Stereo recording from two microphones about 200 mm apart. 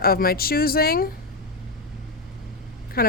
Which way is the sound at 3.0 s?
50° left (ahead or behind).